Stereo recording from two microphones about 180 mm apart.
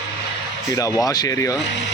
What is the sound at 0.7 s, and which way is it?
Speech, 20° left (ahead or behind).